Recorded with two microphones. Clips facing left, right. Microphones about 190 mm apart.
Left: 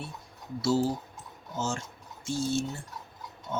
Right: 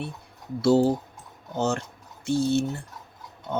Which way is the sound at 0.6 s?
60° right (ahead or behind).